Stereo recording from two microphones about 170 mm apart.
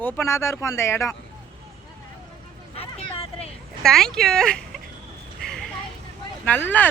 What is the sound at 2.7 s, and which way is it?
Vehicle, 35° left (ahead or behind).